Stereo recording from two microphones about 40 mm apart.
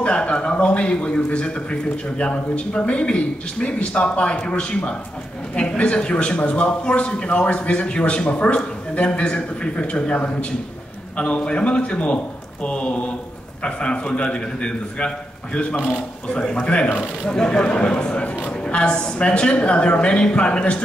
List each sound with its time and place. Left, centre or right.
0.0 s a man's voice: left
15.7 s speech: right
16.6 s a man's voice: left
16.9 s speech: right
17.3 s a man's voice: left